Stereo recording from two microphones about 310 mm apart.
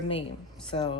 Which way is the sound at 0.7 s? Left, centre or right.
Centre.